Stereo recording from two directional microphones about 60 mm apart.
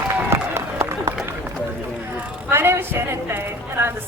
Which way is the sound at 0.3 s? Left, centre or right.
Right.